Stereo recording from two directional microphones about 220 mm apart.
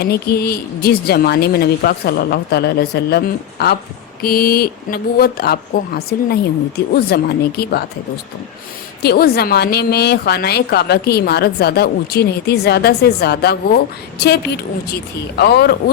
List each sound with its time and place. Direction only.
0.0 s speech: 45° left (ahead or behind)
9.0 s speech: 45° left (ahead or behind)